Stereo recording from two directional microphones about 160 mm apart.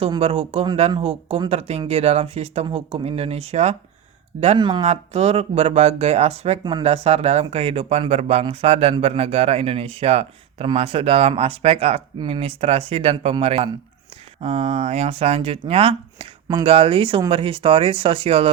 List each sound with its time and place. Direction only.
0.2 s speech: 35° right (ahead or behind)
4.5 s speech: 30° right (ahead or behind)
4.9 s speech: 40° right (ahead or behind)